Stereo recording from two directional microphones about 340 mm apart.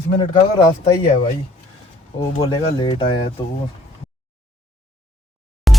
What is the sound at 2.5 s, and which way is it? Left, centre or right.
Speech, centre.